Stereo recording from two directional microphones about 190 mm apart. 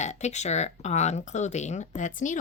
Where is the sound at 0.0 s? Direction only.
35° left (ahead or behind).